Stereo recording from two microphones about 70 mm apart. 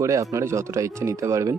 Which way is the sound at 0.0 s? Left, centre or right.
Right.